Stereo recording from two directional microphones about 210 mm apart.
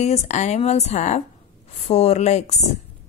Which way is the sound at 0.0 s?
35° left (ahead or behind).